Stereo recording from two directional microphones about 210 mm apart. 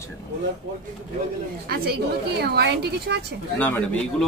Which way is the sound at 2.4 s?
50° right (ahead or behind).